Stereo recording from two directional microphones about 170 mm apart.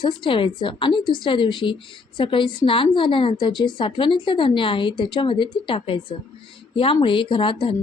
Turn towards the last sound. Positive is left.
turn(degrees=30)  # may be behind; listen again after turning